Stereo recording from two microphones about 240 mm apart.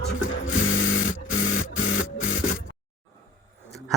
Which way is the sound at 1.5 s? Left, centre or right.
Left.